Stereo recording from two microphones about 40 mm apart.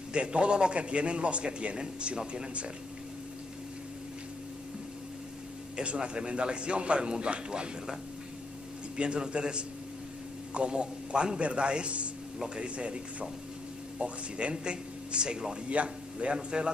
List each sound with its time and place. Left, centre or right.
0.1 s a man's voice: right
5.8 s a man's voice: right
8.9 s a man's voice: right